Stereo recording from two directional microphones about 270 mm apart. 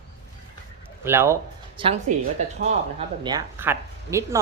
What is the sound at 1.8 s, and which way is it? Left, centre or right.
Speech, right.